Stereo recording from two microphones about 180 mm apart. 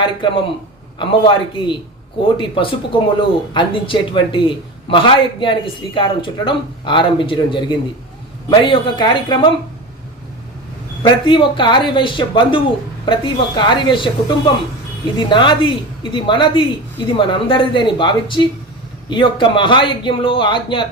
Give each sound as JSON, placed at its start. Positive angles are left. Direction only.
{"t": 0.0, "sound": "a man's voice", "side_deg": 25}
{"t": 11.0, "sound": "a man's voice", "side_deg": 25}